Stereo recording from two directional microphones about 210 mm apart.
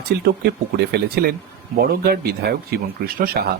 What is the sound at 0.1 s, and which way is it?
Speech, 45° right (ahead or behind).